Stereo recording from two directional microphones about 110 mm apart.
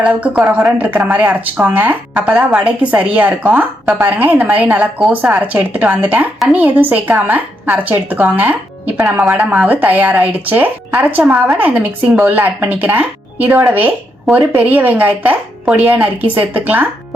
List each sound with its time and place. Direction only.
0.0 s a woman's voice: 10° right (ahead or behind)